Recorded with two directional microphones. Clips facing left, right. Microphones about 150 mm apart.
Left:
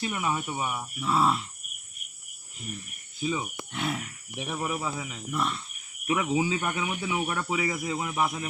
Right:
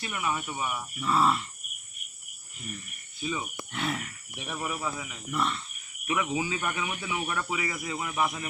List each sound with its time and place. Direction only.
0.0 s speech: 25° left (ahead or behind)
0.9 s speech: 5° left (ahead or behind)
3.7 s speech: 5° left (ahead or behind)
4.4 s speech: 15° left (ahead or behind)
5.3 s speech: 5° left (ahead or behind)
6.1 s speech: 25° left (ahead or behind)